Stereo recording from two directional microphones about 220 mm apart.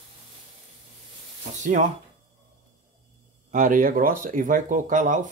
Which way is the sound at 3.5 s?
40° right (ahead or behind).